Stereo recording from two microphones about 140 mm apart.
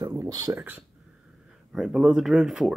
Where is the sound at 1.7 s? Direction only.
5° right (ahead or behind).